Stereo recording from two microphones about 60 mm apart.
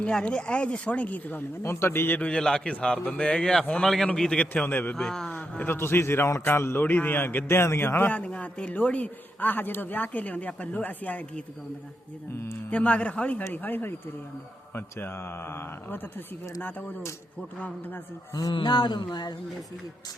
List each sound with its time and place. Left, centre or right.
0.1 s speech: centre
1.6 s speech: left
2.2 s a man's voice: centre
4.4 s speech: left
4.9 s a man's voice: centre
5.3 s speech: left
6.8 s speech: left
8.1 s speech: left
12.7 s speech: left